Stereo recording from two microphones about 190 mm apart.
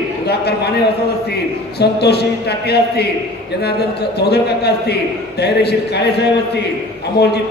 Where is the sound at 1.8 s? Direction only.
60° left (ahead or behind).